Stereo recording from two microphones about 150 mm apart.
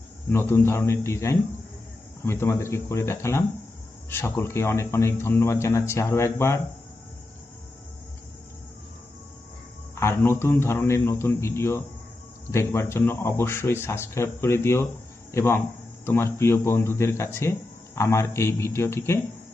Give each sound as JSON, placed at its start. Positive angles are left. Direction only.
{"t": 0.3, "sound": "speech", "side_deg": 15}
{"t": 9.9, "sound": "speech", "side_deg": 15}